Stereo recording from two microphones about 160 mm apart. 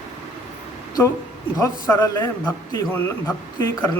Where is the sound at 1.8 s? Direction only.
15° left (ahead or behind).